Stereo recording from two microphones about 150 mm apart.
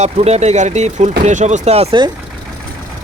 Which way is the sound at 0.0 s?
45° right (ahead or behind).